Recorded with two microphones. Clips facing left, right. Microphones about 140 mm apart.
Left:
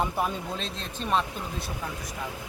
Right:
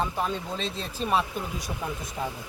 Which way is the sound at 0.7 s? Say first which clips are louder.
Right 1 dB; 5° right (ahead or behind).